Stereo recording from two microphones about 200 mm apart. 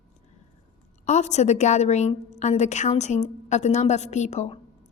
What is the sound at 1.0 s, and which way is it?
A woman's voice, 35° left (ahead or behind).